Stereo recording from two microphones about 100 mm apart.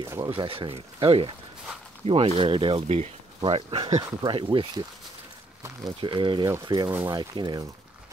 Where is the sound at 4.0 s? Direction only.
50° right (ahead or behind).